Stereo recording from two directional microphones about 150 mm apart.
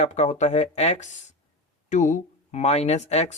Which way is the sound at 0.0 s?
50° left (ahead or behind).